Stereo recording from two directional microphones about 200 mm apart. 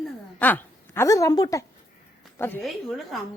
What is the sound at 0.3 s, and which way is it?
A woman's voice, 10° left (ahead or behind).